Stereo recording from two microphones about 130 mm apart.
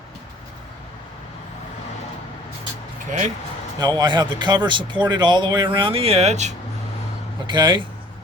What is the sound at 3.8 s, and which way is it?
Speech, 35° right (ahead or behind).